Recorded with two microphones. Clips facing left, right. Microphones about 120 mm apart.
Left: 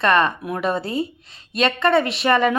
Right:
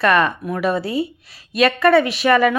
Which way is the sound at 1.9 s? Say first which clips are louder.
Right 3 dB; centre (ahead or behind).